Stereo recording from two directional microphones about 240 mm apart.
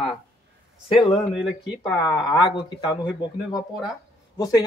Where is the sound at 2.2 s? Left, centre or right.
Centre.